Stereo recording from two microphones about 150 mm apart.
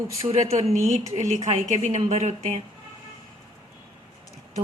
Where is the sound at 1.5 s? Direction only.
55° right (ahead or behind).